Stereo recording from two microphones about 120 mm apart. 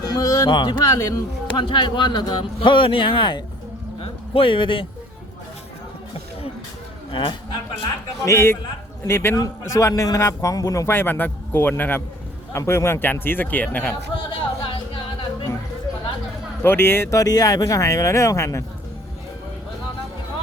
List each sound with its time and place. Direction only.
0.0 s speech: 30° left (ahead or behind)
1.5 s speech: 40° left (ahead or behind)
7.1 s a man's voice: 45° left (ahead or behind)
8.2 s a man's voice: 25° left (ahead or behind)
14.3 s music: 45° left (ahead or behind)
16.6 s a man's voice: 20° left (ahead or behind)